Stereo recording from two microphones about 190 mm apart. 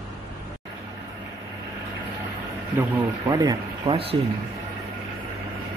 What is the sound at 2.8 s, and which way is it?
Speech, 10° right (ahead or behind).